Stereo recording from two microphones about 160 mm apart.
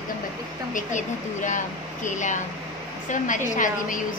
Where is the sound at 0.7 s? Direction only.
55° left (ahead or behind).